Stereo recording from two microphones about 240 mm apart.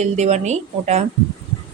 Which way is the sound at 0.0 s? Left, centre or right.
Right.